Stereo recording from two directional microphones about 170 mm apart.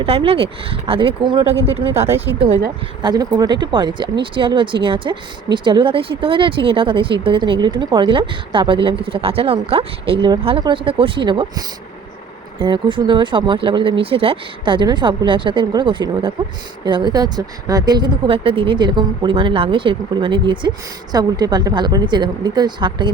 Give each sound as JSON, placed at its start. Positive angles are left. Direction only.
{"t": 0.0, "sound": "speech", "side_deg": -35}
{"t": 3.0, "sound": "speech", "side_deg": -25}